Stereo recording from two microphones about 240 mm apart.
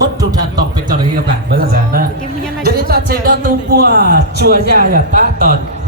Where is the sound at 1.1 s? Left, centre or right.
Right.